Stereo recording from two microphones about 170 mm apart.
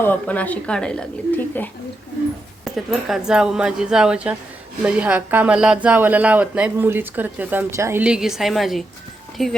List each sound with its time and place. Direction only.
0.0 s speech: 10° left (ahead or behind)
2.7 s speech: centre (ahead or behind)